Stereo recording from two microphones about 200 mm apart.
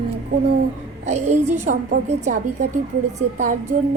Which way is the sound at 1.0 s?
35° right (ahead or behind).